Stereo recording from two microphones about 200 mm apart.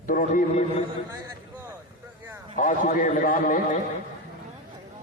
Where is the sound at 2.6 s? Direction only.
40° left (ahead or behind).